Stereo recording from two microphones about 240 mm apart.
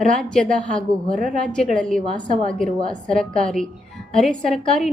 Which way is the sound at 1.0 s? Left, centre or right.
Right.